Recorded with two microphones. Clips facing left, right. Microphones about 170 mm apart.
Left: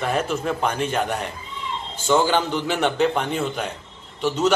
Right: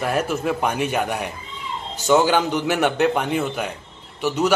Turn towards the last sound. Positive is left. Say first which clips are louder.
# even
turn(degrees=-10)  # may be behind; listen again after turning